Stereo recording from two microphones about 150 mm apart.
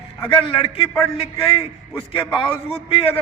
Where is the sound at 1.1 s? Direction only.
40° left (ahead or behind).